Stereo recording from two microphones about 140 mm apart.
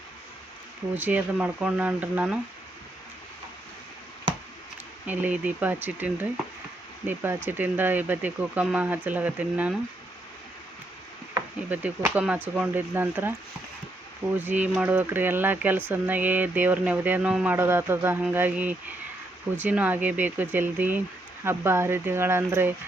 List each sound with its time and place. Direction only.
0.9 s speech: 10° right (ahead or behind)
5.0 s speech: 10° right (ahead or behind)
11.7 s speech: 10° right (ahead or behind)